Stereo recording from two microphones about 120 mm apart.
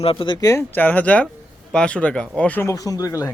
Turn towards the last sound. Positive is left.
turn(degrees=30)  # may be behind; listen again after turning